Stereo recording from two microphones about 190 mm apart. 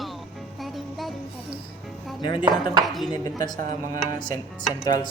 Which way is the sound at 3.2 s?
20° left (ahead or behind).